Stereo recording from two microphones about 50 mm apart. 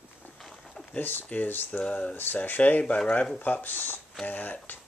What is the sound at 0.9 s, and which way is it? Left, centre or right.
Speech, left.